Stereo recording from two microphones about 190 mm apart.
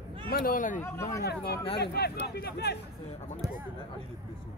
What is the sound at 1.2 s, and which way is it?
Speech, 60° left (ahead or behind).